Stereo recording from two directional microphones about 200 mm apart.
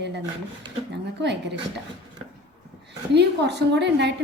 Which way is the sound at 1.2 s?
60° right (ahead or behind).